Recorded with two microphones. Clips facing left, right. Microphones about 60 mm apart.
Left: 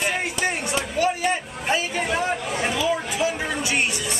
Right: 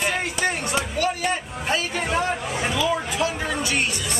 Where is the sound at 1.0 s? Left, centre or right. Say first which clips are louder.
Left 4 dB; centre.